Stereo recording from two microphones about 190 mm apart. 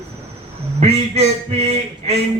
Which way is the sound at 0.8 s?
35° right (ahead or behind).